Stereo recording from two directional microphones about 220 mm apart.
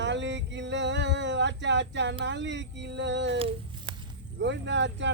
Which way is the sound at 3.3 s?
25° right (ahead or behind).